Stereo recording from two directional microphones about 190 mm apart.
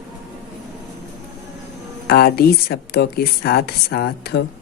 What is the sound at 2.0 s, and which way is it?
Speech, 55° left (ahead or behind).